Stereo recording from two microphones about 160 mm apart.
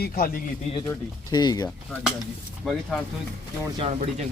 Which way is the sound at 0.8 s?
20° left (ahead or behind).